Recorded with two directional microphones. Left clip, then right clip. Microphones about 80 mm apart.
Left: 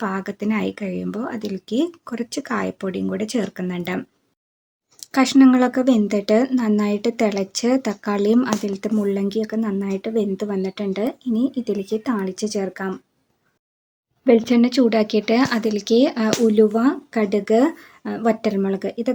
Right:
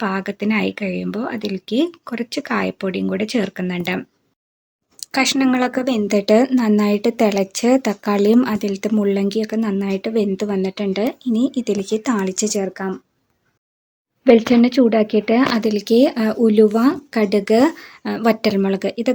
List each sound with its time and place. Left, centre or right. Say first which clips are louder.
0.0 s speech: right 3 dB; centre
14.3 s speech: right 3 dB; right
15.6 s speech: right 3 dB; right